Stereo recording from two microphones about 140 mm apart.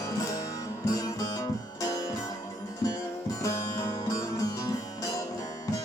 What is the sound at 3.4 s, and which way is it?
Music, 25° left (ahead or behind).